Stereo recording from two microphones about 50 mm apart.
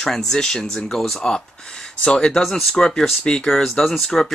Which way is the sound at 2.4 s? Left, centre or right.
Centre.